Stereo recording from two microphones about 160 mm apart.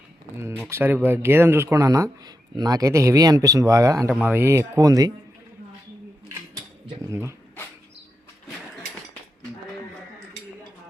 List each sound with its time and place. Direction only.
0.6 s speech: 15° right (ahead or behind)
4.1 s speech: 10° right (ahead or behind)
7.1 s speech: 15° right (ahead or behind)